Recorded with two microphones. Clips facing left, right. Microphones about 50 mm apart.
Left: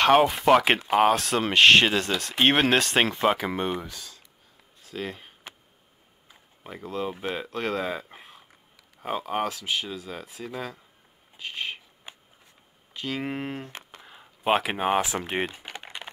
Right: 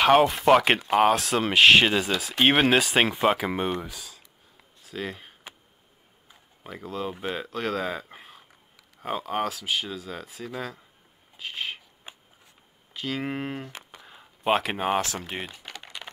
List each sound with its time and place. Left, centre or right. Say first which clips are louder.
0.0 s speech: even; centre
11.3 s a sound: even; centre
12.9 s speech: even; centre
14.0 s a sound: even; centre
15.0 s speech: left 3 dB; centre
15.7 s typing: left 2 dB; left